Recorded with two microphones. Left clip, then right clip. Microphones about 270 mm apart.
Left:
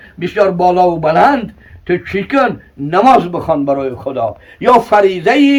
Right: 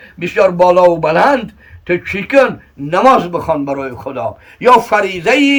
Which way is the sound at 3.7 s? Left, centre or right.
Centre.